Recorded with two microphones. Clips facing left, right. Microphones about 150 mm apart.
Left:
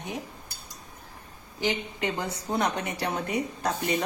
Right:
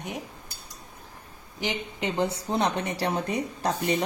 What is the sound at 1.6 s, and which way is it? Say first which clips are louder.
A woman's voice: left 2 dB; 15° right (ahead or behind).